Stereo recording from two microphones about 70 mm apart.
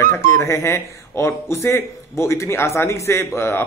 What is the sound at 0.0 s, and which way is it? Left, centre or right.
A man's voice, left.